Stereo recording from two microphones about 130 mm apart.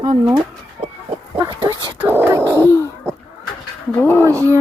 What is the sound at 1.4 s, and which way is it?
Dog, 35° right (ahead or behind).